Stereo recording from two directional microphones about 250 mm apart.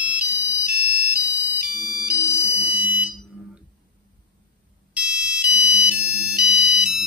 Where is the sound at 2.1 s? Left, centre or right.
Centre.